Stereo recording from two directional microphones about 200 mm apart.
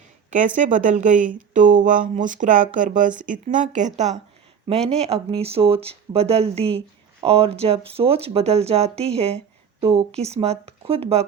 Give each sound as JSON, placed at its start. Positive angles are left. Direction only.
{"t": 0.3, "sound": "speech", "side_deg": -40}